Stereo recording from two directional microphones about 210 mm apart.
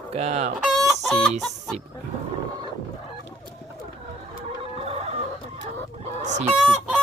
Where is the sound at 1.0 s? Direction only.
5° left (ahead or behind).